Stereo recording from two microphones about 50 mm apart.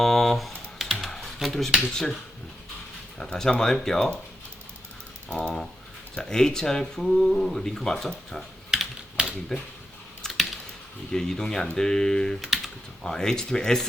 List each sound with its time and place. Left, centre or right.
0.0 s typing: centre
1.8 s speech: centre
3.2 s speech: centre
5.3 s speech: centre
7.0 s speech: centre
9.2 s a sound: right
10.2 s typing: centre
11.1 s speech: centre